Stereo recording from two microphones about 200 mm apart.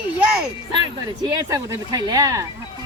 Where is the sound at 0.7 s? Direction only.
20° right (ahead or behind).